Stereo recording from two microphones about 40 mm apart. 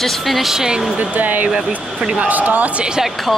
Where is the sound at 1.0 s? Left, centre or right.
Right.